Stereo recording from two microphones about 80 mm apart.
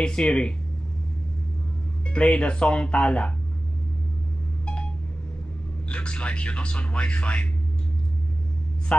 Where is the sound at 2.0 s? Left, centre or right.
Centre.